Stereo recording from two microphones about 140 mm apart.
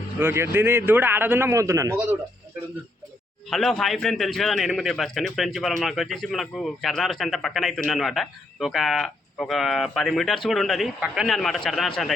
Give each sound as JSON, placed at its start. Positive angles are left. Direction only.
{"t": 0.2, "sound": "a man's voice", "side_deg": -15}
{"t": 3.5, "sound": "a man's voice", "side_deg": 5}